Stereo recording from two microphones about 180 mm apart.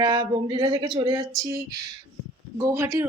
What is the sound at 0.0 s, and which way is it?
Speech, 25° right (ahead or behind).